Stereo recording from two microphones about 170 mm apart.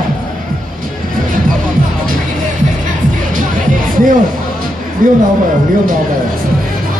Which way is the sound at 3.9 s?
55° right (ahead or behind).